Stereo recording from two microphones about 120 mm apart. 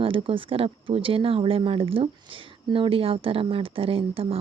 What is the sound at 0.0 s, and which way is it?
Speech, 50° right (ahead or behind).